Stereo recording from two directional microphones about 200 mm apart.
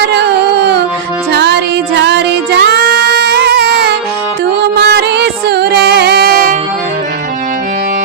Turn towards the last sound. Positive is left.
turn(degrees=-50)  # may be behind; listen again after turning